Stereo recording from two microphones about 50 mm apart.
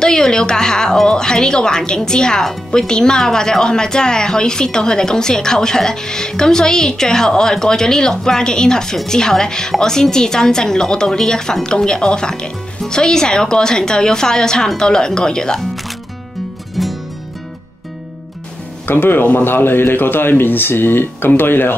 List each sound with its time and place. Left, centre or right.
0.0 s a woman's voice: centre
16.8 s music: centre
18.9 s speech: left